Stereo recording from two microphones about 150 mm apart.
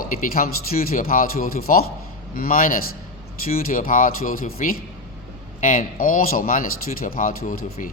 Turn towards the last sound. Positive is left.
turn(degrees=80)